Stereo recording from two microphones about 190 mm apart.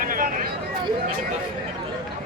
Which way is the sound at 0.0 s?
45° right (ahead or behind).